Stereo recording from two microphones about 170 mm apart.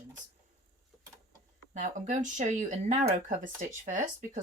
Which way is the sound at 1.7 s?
45° right (ahead or behind).